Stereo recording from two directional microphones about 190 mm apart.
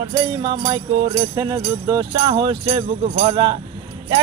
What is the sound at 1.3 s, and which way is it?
Music, 20° right (ahead or behind).